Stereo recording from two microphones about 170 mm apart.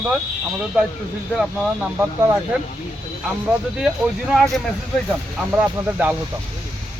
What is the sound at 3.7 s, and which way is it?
Speech, 5° right (ahead or behind).